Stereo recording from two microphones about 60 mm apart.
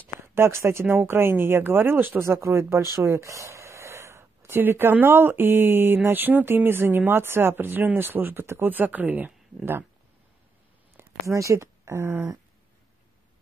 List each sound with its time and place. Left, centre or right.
0.3 s speech: right
2.2 s speech: right
11.0 s speech: right